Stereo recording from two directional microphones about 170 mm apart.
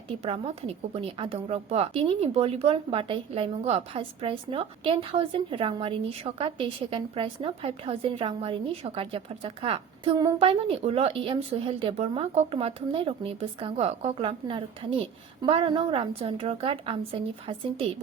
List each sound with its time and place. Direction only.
0.3 s a woman's voice: 35° right (ahead or behind)